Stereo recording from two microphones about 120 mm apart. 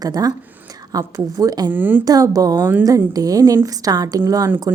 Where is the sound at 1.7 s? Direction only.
15° right (ahead or behind).